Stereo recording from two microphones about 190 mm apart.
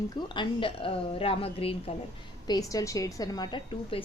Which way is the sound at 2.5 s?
20° left (ahead or behind).